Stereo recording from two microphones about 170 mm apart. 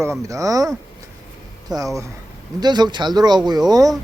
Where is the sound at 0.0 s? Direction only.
15° right (ahead or behind).